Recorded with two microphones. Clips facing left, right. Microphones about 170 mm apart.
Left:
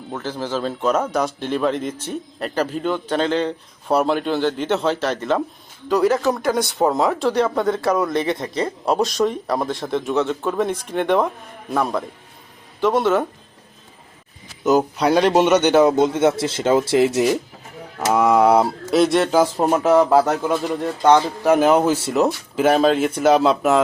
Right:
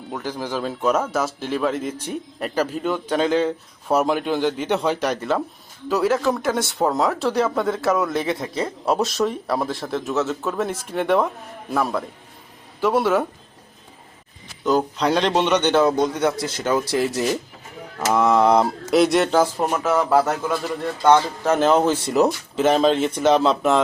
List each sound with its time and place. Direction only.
0.1 s a man's voice: 10° right (ahead or behind)
14.6 s speech: 10° left (ahead or behind)
16.0 s speech: 25° left (ahead or behind); by 19.4 s centre (ahead or behind)
19.5 s speech: 30° left (ahead or behind)
20.1 s speech: 10° left (ahead or behind)